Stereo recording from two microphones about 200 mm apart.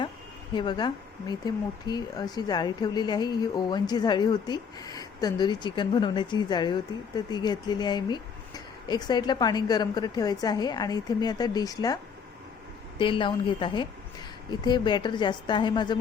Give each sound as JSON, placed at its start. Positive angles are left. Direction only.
{"t": 0.5, "sound": "speech", "side_deg": 20}
{"t": 13.0, "sound": "speech", "side_deg": 25}